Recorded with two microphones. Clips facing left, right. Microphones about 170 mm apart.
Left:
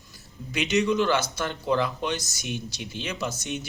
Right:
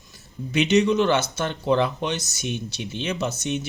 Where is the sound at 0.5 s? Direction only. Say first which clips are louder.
Right 5 dB; 25° right (ahead or behind).